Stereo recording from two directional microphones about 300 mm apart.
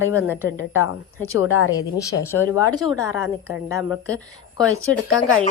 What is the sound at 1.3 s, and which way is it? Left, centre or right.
Speech, left.